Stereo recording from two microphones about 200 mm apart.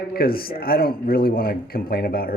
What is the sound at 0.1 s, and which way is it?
Speech, 50° left (ahead or behind).